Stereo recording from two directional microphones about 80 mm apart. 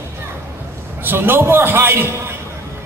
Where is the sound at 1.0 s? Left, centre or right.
Right.